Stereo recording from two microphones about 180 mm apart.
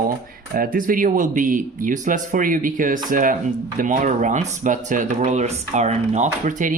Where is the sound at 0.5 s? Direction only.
50° right (ahead or behind).